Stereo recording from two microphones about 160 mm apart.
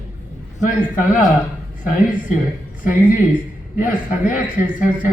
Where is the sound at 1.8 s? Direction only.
55° left (ahead or behind).